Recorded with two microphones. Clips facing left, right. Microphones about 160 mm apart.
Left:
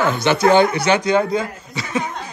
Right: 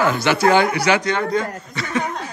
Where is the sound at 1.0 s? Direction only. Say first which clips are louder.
Left 3 dB; 10° left (ahead or behind).